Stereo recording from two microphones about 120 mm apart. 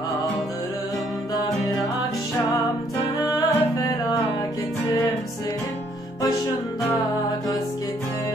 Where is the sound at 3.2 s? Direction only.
35° left (ahead or behind).